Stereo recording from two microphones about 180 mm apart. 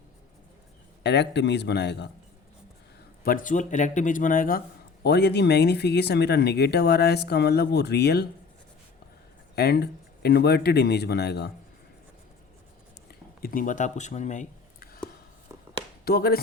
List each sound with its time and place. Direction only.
1.0 s a man's voice: 70° left (ahead or behind)
3.2 s speech: 45° left (ahead or behind)
5.0 s speech: 65° left (ahead or behind)
9.6 s speech: 65° left (ahead or behind)
13.1 s a sound: 55° left (ahead or behind)
16.0 s speech: 55° left (ahead or behind)